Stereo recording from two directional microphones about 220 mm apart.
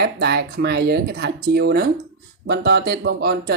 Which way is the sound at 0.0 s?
50° right (ahead or behind).